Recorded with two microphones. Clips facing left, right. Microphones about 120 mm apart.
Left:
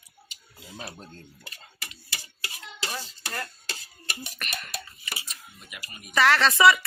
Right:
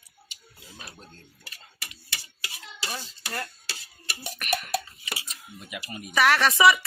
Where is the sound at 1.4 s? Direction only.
30° left (ahead or behind).